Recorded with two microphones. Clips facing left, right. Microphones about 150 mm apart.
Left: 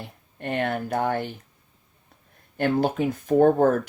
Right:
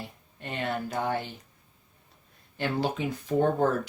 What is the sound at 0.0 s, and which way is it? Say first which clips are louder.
Speech: left 6 dB; 55° left (ahead or behind).